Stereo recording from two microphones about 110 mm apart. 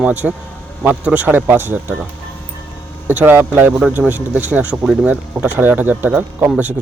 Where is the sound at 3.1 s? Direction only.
15° right (ahead or behind).